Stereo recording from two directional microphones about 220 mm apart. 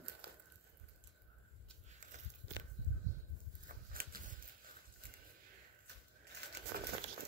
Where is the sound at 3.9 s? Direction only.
40° right (ahead or behind).